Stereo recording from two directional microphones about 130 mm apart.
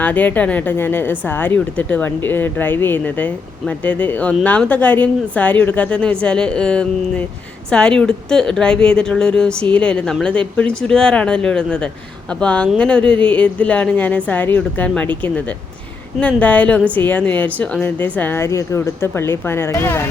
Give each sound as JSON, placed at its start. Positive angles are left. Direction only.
{"t": 0.0, "sound": "a woman's voice", "side_deg": 10}
{"t": 16.2, "sound": "a woman's voice", "side_deg": 10}